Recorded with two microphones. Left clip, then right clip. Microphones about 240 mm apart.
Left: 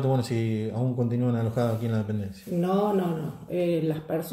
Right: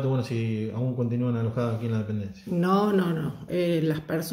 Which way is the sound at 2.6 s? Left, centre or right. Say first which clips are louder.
Right 1 dB; right.